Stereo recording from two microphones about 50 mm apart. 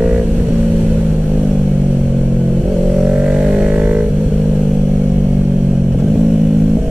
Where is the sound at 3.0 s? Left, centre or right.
Centre.